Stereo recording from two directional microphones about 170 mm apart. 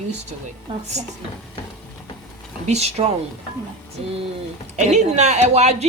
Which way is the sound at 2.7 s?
40° right (ahead or behind).